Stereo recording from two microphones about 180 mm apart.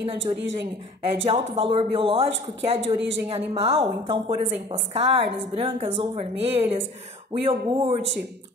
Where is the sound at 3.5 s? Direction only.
35° right (ahead or behind).